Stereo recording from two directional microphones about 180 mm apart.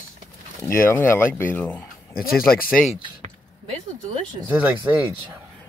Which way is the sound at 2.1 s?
55° left (ahead or behind).